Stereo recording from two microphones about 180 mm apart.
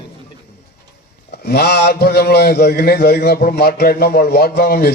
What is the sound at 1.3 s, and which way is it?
Speech, 65° left (ahead or behind).